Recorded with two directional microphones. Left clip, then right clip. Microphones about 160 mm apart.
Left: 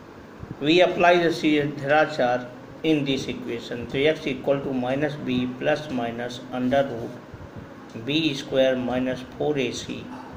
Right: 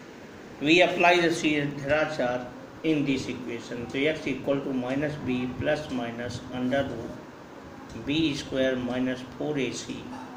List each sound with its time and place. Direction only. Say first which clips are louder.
0.7 s a man's voice: left 2 dB; 50° left (ahead or behind); by 6.8 s 65° left (ahead or behind)
8.0 s speech: left 3 dB; 60° left (ahead or behind)